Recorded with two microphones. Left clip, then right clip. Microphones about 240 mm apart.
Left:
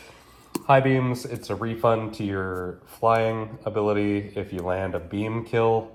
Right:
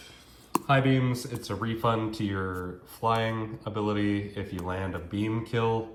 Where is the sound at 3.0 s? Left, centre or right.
Left.